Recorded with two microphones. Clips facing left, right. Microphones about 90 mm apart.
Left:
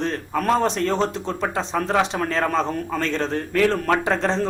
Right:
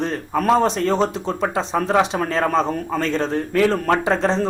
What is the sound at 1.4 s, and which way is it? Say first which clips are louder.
Speech: right 3 dB; 15° right (ahead or behind).